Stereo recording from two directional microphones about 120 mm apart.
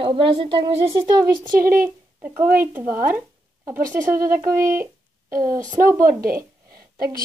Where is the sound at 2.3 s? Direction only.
20° right (ahead or behind).